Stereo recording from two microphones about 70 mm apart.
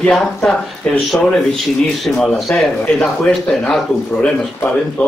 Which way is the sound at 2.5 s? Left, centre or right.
Centre.